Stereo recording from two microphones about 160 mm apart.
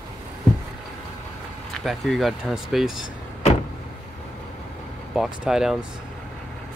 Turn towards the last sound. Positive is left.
turn(degrees=-5)  # may be behind; listen again after turning